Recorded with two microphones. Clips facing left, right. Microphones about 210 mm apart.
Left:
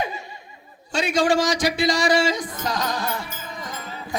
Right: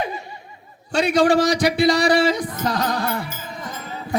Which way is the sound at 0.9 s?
60° right (ahead or behind).